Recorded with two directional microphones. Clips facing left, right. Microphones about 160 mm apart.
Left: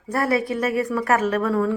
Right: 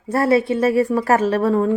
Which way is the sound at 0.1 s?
25° right (ahead or behind).